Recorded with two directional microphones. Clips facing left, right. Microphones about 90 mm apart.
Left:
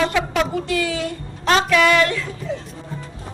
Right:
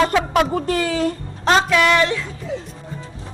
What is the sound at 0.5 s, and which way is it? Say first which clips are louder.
Speech: right 2 dB; 40° right (ahead or behind).